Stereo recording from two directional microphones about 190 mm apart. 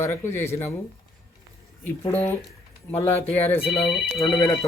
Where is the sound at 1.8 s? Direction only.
10° left (ahead or behind).